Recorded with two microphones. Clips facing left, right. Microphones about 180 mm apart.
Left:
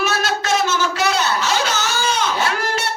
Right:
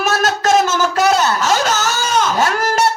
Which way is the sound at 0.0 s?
45° right (ahead or behind).